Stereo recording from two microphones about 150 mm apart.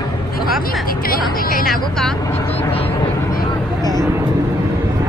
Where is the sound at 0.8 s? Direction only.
75° left (ahead or behind).